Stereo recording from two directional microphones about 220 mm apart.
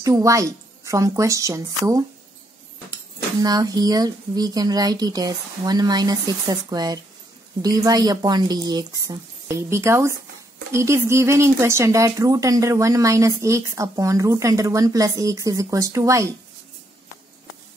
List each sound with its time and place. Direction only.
0.0 s speech: 15° right (ahead or behind)
3.4 s speech: 15° right (ahead or behind)